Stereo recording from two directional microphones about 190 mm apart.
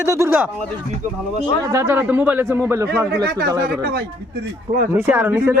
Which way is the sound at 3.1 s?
55° right (ahead or behind).